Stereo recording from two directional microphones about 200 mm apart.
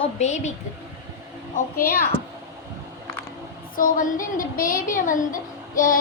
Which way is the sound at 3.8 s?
40° left (ahead or behind).